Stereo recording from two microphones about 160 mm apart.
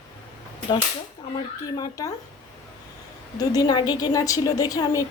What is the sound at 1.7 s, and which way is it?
Speech, 25° left (ahead or behind).